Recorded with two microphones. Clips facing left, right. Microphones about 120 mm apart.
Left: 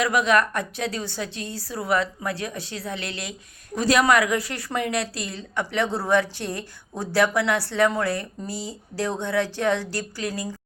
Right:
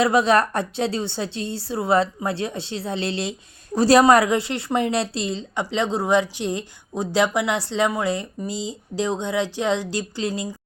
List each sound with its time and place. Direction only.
0.0 s a woman's voice: 30° right (ahead or behind)